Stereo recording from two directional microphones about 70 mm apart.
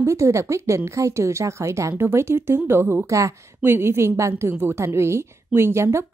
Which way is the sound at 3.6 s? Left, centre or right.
Right.